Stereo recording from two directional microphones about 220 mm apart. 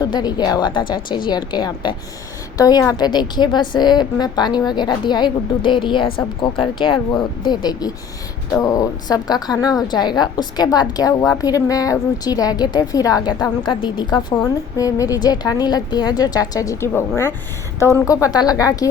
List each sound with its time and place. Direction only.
0.0 s a woman's voice: 20° left (ahead or behind)